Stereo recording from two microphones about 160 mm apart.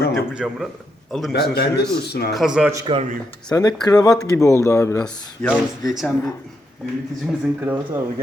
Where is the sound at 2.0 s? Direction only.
90° left.